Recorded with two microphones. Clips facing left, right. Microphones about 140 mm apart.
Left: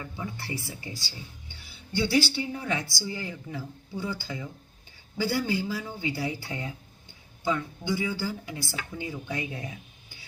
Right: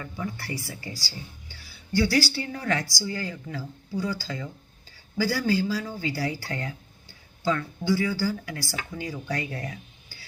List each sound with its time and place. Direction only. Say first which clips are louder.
0.0 s speech: right 3 dB; 20° left (ahead or behind)